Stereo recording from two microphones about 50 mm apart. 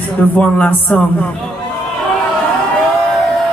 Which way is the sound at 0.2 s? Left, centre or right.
Left.